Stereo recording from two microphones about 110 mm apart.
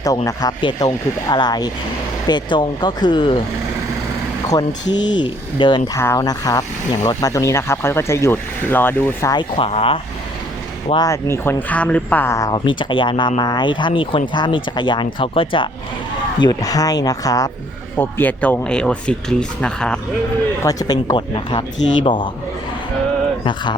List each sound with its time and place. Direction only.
0.6 s speech: 35° left (ahead or behind)
4.4 s speech: 35° left (ahead or behind)
6.0 s speech: 25° left (ahead or behind)
6.2 s speech: 35° left (ahead or behind)
9.3 s speech: 45° left (ahead or behind)
9.6 s speech: 60° left (ahead or behind)
10.9 s speech: 30° left (ahead or behind)
11.7 s speech: 10° left (ahead or behind)
12.4 s speech: 40° left (ahead or behind)
16.4 s speech: 35° left (ahead or behind)
17.9 s speech: 15° left (ahead or behind)
20.6 s speech: 30° left (ahead or behind); by 22.3 s 50° left (ahead or behind)